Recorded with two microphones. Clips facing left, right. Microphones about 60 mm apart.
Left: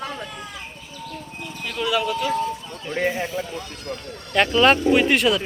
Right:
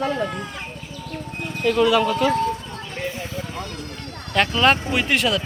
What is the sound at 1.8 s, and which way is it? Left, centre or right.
Speech, centre.